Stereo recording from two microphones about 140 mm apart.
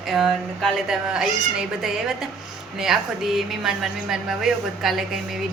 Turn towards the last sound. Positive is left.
turn(degrees=0)  # may be behind; listen again after turning